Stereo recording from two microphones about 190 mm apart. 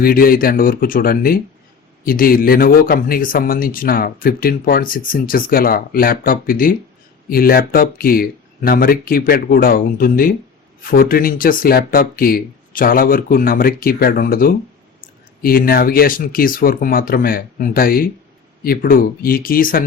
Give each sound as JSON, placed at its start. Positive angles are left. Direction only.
{"t": 0.0, "sound": "speech", "side_deg": 50}